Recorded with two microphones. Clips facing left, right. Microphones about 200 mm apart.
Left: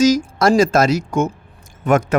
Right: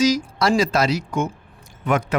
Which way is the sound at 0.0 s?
45° left (ahead or behind).